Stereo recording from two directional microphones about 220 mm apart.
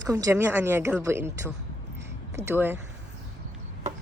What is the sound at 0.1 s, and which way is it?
A woman's voice, 15° right (ahead or behind).